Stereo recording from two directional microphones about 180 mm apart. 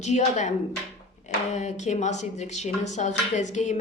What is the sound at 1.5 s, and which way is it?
A woman's voice, 40° left (ahead or behind).